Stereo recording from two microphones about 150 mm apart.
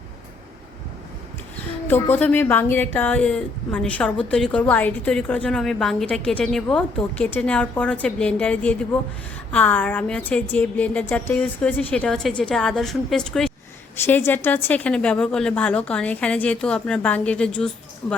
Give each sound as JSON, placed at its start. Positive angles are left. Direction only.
{"t": 1.9, "sound": "a woman's voice", "side_deg": 10}
{"t": 14.0, "sound": "a woman's voice", "side_deg": 15}